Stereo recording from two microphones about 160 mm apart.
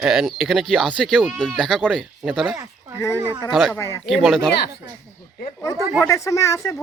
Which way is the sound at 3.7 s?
15° left (ahead or behind).